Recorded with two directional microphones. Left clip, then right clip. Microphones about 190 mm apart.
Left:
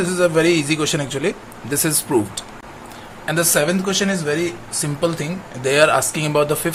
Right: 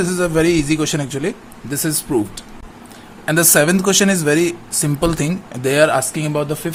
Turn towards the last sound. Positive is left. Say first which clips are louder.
# left 3 dB
turn(degrees=-20)  # may be behind; listen again after turning